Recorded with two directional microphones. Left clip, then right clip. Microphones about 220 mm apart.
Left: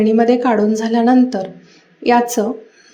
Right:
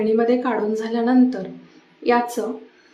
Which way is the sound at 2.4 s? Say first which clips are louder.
Left 7 dB; 25° left (ahead or behind).